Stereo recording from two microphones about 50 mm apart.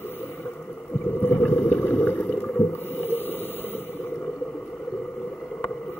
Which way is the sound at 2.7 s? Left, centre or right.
Left.